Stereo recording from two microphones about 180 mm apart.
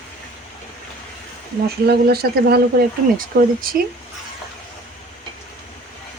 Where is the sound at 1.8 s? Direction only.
60° right (ahead or behind).